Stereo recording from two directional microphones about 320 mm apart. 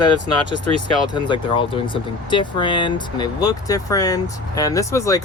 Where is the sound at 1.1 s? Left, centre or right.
Centre.